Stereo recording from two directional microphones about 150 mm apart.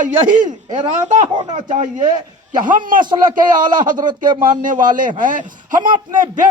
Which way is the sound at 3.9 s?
30° right (ahead or behind).